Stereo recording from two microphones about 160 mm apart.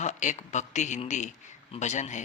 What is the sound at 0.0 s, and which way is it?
Speech, 50° left (ahead or behind).